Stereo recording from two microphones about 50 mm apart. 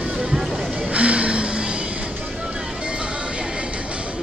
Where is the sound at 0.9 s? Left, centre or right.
Right.